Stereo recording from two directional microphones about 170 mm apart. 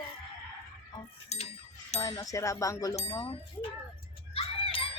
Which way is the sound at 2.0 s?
20° left (ahead or behind).